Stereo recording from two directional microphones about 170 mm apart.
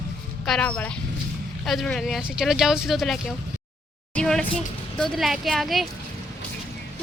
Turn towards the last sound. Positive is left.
turn(degrees=0)  # may be behind; listen again after turning